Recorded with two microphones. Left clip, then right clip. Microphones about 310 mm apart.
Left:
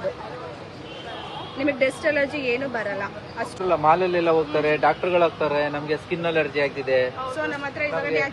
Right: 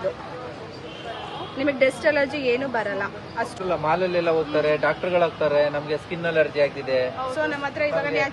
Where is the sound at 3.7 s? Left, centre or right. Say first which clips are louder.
Left 5 dB; left.